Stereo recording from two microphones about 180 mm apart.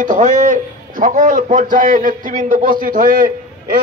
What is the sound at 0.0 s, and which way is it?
A man's voice, 45° right (ahead or behind).